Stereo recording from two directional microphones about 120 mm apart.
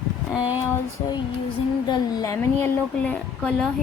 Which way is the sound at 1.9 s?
30° left (ahead or behind).